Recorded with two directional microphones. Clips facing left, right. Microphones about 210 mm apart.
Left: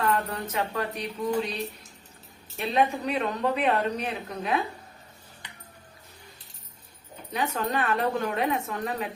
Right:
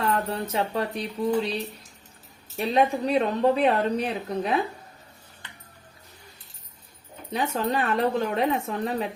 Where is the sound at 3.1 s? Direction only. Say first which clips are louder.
Right 6 dB; 35° right (ahead or behind).